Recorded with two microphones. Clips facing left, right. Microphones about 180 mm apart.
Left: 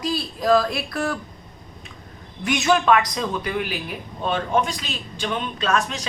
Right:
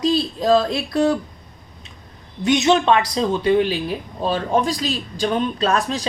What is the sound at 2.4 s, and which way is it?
Speech, 25° right (ahead or behind).